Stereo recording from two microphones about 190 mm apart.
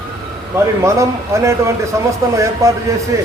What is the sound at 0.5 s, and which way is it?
A man's voice, 15° right (ahead or behind).